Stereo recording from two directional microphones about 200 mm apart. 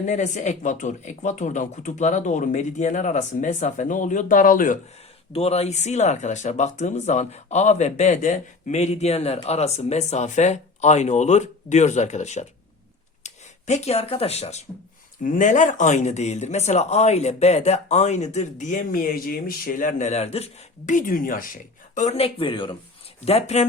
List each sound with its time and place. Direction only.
0.0 s speech: 35° left (ahead or behind)
5.3 s speech: 30° left (ahead or behind)